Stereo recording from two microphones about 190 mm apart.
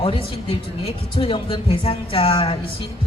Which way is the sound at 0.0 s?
30° left (ahead or behind).